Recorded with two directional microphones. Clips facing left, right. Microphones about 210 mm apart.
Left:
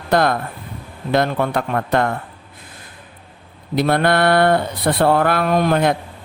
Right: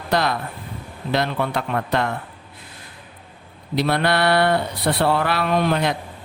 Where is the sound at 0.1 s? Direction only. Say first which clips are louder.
Left 5 dB; 50° left (ahead or behind).